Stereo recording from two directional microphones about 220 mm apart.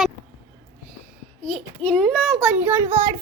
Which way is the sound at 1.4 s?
5° left (ahead or behind).